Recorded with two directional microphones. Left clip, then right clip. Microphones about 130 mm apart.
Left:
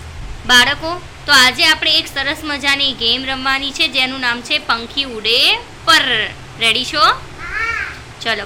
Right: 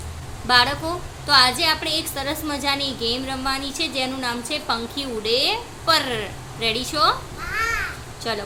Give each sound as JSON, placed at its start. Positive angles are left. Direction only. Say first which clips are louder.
{"t": 0.4, "sound": "a woman's voice", "louder": "left 6 dB", "side_deg": -5}
{"t": 8.2, "sound": "speech", "louder": "left 8 dB", "side_deg": -5}